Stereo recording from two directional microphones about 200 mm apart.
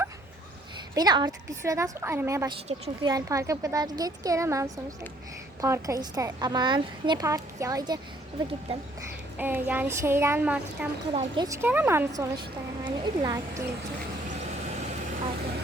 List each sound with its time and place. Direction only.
0.9 s a woman's voice: 20° right (ahead or behind)
2.6 s speech: 30° right (ahead or behind)
3.1 s a woman's voice: 15° right (ahead or behind)
9.4 s a woman's voice: 10° right (ahead or behind)
11.1 s a woman's voice: 20° right (ahead or behind)